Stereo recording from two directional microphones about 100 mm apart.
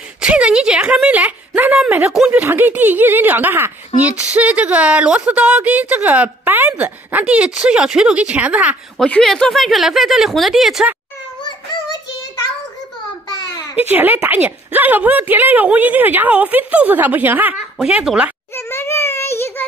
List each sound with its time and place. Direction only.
0.2 s a woman's voice: 10° right (ahead or behind)
2.4 s a woman's voice: 20° right (ahead or behind)
8.9 s speech: 10° left (ahead or behind)
11.4 s child singing: 45° left (ahead or behind)
13.7 s a woman's voice: 20° right (ahead or behind)
17.8 s a woman's voice: 5° right (ahead or behind)
18.5 s a sound: 25° left (ahead or behind)